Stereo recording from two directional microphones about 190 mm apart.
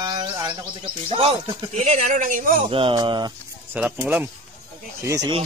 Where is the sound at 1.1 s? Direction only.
30° right (ahead or behind); by 2.7 s 45° right (ahead or behind).